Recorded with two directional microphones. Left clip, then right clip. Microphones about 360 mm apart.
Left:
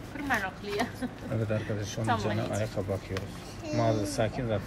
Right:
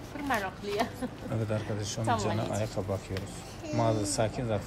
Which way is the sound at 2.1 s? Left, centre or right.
Centre.